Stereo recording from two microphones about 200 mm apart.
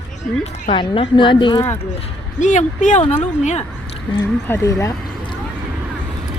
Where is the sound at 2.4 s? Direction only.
40° left (ahead or behind).